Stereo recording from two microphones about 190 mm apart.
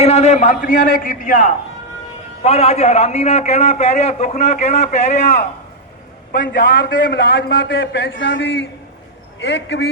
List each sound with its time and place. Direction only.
0.0 s a man's voice: 35° left (ahead or behind)
2.4 s a man's voice: 30° left (ahead or behind)
6.5 s a man's voice: 60° left (ahead or behind)